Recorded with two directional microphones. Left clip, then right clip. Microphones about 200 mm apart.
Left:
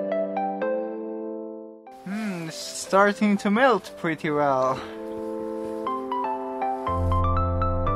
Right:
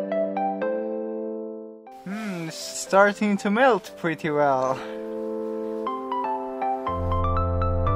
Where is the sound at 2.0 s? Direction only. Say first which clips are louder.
Even; 55° right (ahead or behind).